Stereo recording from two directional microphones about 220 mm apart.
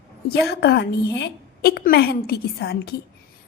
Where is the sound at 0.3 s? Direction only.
45° left (ahead or behind).